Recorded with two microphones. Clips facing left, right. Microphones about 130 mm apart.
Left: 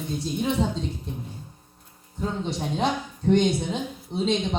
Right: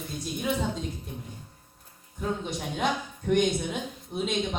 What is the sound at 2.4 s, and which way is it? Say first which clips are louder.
Speech: left 7 dB; 30° left (ahead or behind).